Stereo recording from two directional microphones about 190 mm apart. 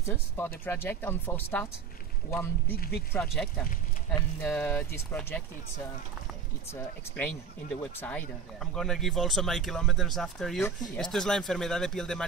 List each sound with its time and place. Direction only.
0.0 s speech: 10° left (ahead or behind)
2.7 s speech: 55° left (ahead or behind)
3.1 s speech: 5° left (ahead or behind)
6.7 s speech: 10° left (ahead or behind)